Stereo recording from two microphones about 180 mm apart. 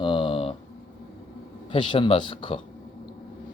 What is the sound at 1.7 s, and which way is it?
Speech, 30° left (ahead or behind).